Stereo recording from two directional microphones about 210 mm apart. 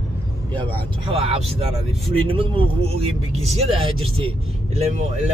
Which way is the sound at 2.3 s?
25° right (ahead or behind).